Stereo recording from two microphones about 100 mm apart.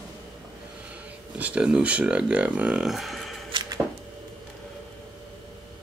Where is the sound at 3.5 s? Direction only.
45° right (ahead or behind).